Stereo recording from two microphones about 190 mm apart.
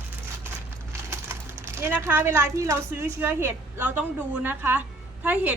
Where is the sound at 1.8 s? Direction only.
10° right (ahead or behind).